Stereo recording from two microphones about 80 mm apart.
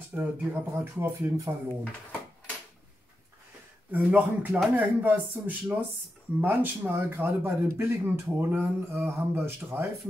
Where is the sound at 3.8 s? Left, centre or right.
Right.